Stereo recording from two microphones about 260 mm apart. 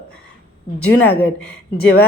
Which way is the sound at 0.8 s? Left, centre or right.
Centre.